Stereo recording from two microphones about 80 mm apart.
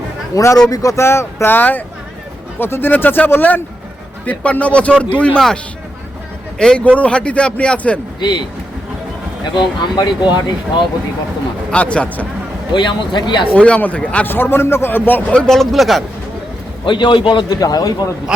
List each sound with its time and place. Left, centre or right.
0.3 s a man's voice: left; by 5.4 s centre
6.6 s a man's voice: centre
8.2 s speech: left
11.7 s a man's voice: centre
12.7 s speech: left
13.6 s a man's voice: centre
14.3 s speech: left
15.3 s speech: centre
16.8 s a man's voice: left
17.5 s speech: left
18.3 s a man's voice: centre